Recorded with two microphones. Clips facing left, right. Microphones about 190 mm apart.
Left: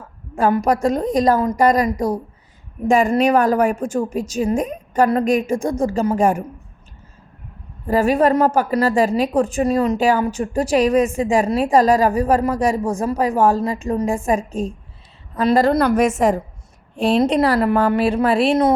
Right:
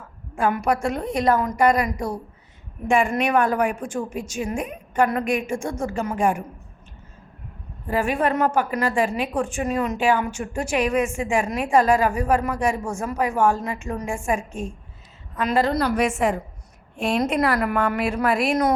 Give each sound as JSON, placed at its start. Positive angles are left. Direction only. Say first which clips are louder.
{"t": 0.3, "sound": "a woman's voice", "louder": "left 5 dB", "side_deg": 40}
{"t": 7.9, "sound": "a woman's voice", "louder": "left 7 dB", "side_deg": 40}